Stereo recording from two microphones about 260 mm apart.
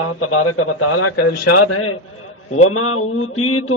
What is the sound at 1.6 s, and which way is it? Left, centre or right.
A man's voice, left.